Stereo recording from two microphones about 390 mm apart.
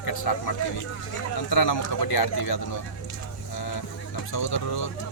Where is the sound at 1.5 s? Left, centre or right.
Left.